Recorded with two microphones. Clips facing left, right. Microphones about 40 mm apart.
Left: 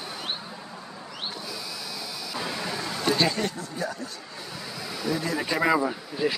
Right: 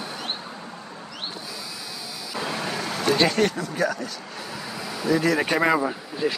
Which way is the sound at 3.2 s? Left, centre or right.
Right.